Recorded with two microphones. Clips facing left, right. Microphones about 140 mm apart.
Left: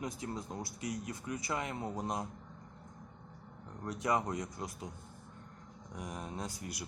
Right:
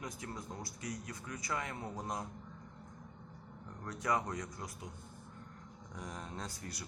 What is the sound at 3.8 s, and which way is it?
Speech, 20° left (ahead or behind).